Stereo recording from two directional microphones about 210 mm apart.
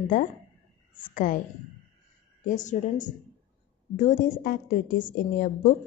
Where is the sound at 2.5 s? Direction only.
35° left (ahead or behind).